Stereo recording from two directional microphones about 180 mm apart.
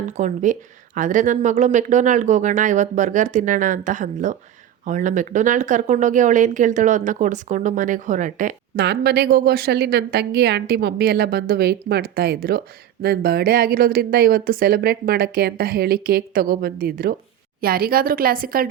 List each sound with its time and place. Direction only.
0.2 s speech: 45° right (ahead or behind)
8.8 s a woman's voice: 65° right (ahead or behind)